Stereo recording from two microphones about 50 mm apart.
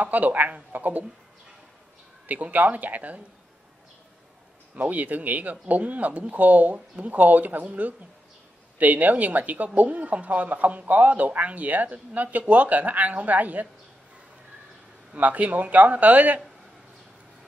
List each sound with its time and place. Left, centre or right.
0.0 s speech: right
2.2 s speech: right
4.7 s speech: right
15.1 s speech: right